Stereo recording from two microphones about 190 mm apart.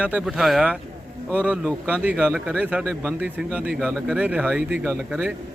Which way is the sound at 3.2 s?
10° right (ahead or behind).